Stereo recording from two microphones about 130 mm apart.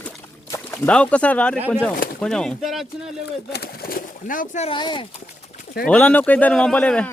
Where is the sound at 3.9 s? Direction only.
90° left.